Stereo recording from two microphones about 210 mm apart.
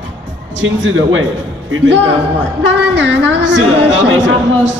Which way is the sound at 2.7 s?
60° right (ahead or behind).